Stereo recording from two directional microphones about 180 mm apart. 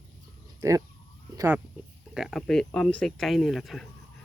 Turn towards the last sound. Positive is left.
turn(degrees=0)  # may be behind; listen again after turning